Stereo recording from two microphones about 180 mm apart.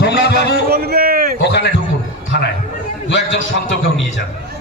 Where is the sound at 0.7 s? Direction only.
60° right (ahead or behind).